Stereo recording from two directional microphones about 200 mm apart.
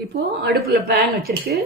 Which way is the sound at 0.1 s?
55° right (ahead or behind).